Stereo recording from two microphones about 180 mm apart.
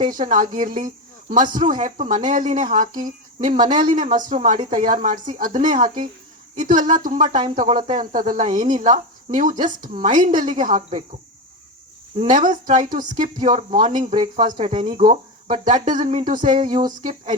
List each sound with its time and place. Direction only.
0.1 s speech: 45° right (ahead or behind)
12.1 s speech: 40° right (ahead or behind)
13.6 s speech: 35° right (ahead or behind)
15.0 s speech: 45° right (ahead or behind)